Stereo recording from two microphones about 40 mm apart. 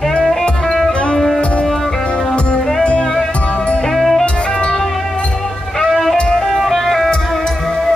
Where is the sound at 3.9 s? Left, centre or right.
Centre.